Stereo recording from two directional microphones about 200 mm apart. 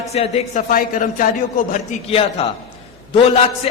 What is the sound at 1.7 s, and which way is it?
Speech, 30° left (ahead or behind).